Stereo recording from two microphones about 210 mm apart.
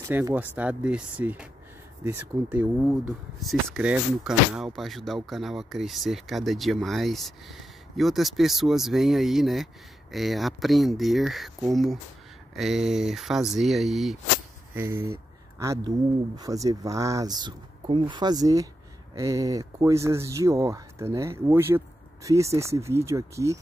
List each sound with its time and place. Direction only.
0.1 s speech: 10° right (ahead or behind)
14.7 s speech: 10° right (ahead or behind)